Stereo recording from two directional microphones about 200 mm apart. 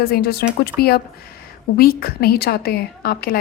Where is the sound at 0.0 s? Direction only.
50° left (ahead or behind).